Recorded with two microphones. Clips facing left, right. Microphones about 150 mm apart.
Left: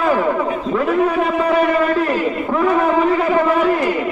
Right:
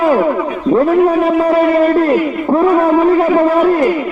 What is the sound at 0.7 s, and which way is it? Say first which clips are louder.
Speech: right 8 dB; 35° right (ahead or behind).